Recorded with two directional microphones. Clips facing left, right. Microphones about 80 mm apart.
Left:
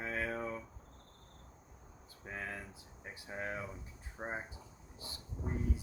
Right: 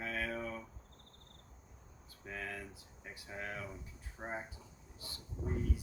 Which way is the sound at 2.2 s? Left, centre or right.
Left.